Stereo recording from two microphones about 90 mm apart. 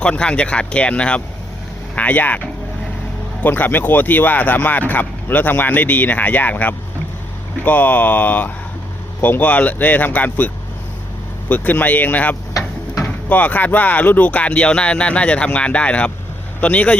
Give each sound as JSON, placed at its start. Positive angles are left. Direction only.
{"t": 0.0, "sound": "speech", "side_deg": 10}